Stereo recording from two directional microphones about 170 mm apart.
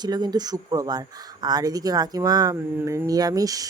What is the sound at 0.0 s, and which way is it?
Speech, 25° right (ahead or behind).